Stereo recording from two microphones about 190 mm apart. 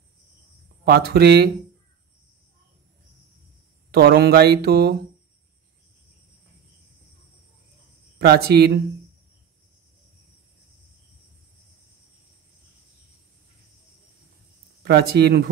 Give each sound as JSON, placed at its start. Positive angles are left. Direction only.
{"t": 0.8, "sound": "speech", "side_deg": -55}
{"t": 3.9, "sound": "speech", "side_deg": -55}
{"t": 8.2, "sound": "speech", "side_deg": -55}
{"t": 14.8, "sound": "speech", "side_deg": -60}